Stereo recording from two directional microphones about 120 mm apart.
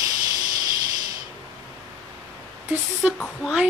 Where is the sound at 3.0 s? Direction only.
10° right (ahead or behind).